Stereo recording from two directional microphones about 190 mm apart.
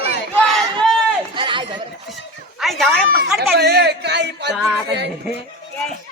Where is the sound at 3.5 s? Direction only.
55° right (ahead or behind).